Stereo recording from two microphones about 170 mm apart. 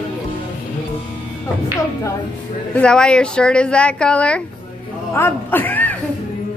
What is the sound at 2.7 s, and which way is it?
Speech, 5° left (ahead or behind).